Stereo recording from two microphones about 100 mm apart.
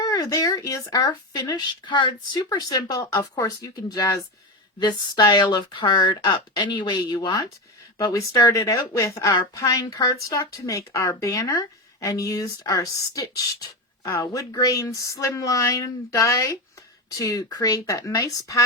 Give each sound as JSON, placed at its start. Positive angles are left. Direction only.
{"t": 0.0, "sound": "a woman's voice", "side_deg": 40}
{"t": 4.8, "sound": "speech", "side_deg": 45}
{"t": 7.9, "sound": "a woman's voice", "side_deg": 35}